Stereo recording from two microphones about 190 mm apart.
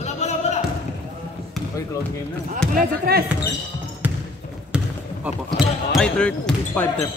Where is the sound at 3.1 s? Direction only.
50° right (ahead or behind).